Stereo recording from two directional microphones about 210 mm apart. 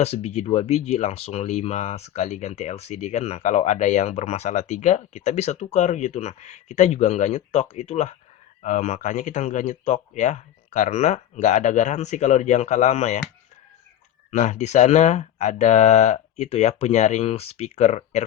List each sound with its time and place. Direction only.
0.0 s speech: 30° left (ahead or behind)
14.3 s speech: 35° left (ahead or behind)